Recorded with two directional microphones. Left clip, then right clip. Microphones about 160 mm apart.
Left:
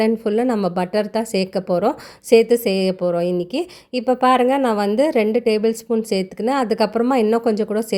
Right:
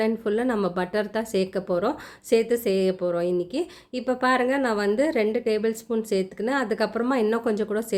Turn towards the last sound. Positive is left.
turn(degrees=35)  # may be behind; listen again after turning